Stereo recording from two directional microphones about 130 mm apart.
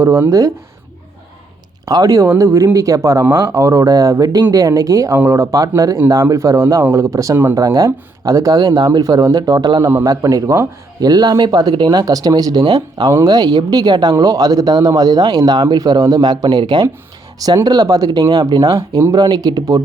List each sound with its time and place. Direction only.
0.0 s speech: 20° right (ahead or behind)
1.8 s speech: 25° right (ahead or behind)